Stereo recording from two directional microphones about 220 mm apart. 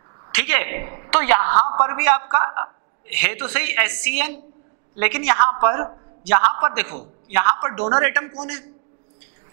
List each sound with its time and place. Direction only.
0.3 s a woman's voice: 10° right (ahead or behind)